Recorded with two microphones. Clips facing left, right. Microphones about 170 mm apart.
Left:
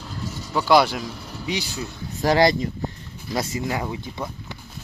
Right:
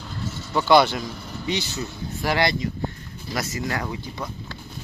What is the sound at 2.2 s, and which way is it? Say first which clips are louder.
Speech: left 5 dB; 40° left (ahead or behind).